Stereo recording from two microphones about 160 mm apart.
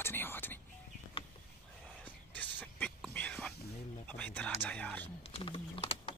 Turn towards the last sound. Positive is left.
turn(degrees=35)  # may be behind; listen again after turning